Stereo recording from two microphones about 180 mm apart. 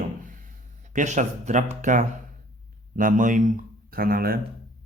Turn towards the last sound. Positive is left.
turn(degrees=-55)  # may be behind; listen again after turning